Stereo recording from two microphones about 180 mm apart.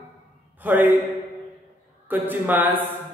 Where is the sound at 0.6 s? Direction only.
10° right (ahead or behind).